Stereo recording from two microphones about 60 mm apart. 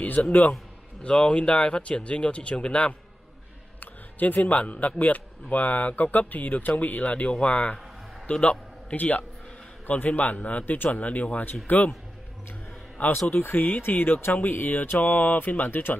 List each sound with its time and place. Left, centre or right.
0.3 s speech: left
1.0 s a man's voice: centre
13.3 s speech: left